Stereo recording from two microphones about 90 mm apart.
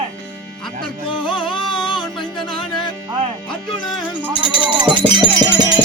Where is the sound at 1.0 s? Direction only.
65° left (ahead or behind).